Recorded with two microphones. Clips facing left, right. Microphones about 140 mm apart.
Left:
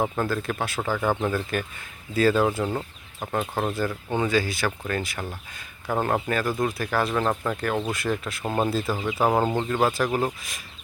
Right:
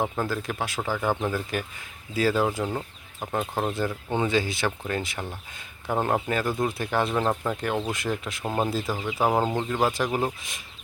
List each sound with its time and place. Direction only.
0.2 s speech: 15° right (ahead or behind)
2.6 s chicken: 5° left (ahead or behind)
3.5 s speech: 15° right (ahead or behind)